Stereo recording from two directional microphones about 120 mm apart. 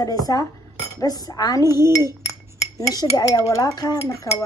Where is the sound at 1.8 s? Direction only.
30° left (ahead or behind).